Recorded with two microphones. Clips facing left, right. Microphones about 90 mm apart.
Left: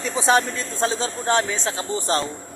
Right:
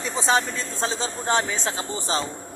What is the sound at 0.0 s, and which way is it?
Speech, 5° left (ahead or behind).